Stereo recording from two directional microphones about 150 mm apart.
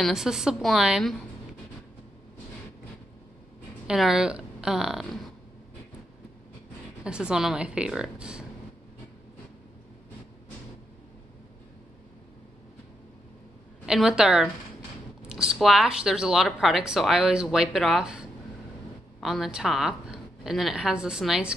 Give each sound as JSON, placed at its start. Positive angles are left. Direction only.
{"t": 0.0, "sound": "speech", "side_deg": -5}
{"t": 3.8, "sound": "a woman's voice", "side_deg": -5}
{"t": 7.0, "sound": "speech", "side_deg": -5}
{"t": 13.8, "sound": "speech", "side_deg": -5}
{"t": 19.2, "sound": "speech", "side_deg": 0}